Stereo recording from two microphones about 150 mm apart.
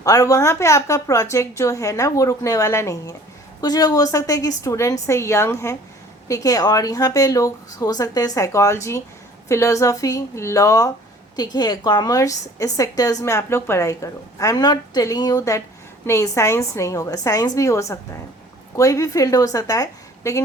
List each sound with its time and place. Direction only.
0.0 s a woman's voice: 20° left (ahead or behind)